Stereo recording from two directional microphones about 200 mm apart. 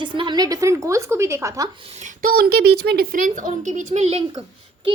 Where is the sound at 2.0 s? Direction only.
50° right (ahead or behind).